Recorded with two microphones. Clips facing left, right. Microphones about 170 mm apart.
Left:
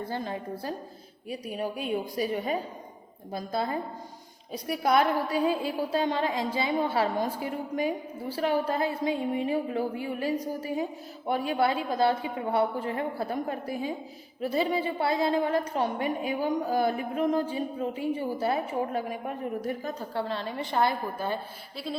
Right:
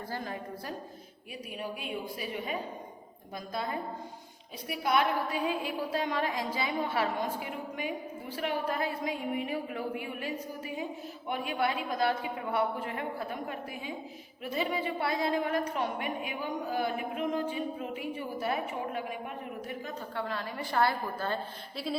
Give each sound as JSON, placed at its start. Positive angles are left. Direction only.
{"t": 0.1, "sound": "a woman's voice", "side_deg": 25}
{"t": 1.3, "sound": "a woman's voice", "side_deg": 40}
{"t": 21.9, "sound": "a sound", "side_deg": 0}